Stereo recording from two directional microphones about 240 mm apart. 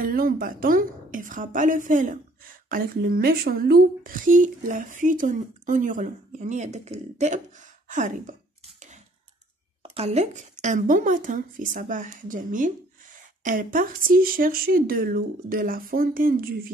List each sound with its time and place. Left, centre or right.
0.0 s speech: right